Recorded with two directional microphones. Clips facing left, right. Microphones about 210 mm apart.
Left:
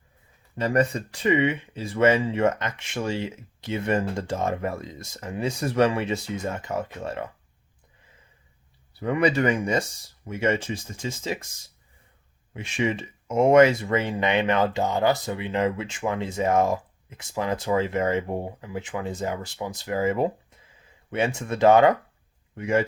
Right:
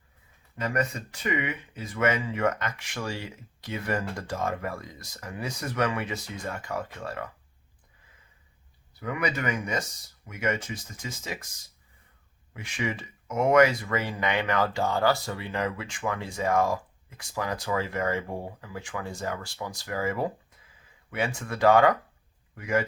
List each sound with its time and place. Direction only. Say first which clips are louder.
0.5 s speech: left 6 dB; 30° left (ahead or behind)
8.9 s speech: left 8 dB; 30° left (ahead or behind)
12.5 s speech: left 6 dB; 25° left (ahead or behind)